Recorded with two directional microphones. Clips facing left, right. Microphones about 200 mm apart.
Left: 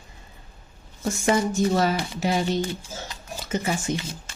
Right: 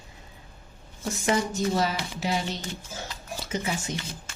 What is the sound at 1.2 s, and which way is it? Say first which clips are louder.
Speech: left 4 dB; 50° left (ahead or behind).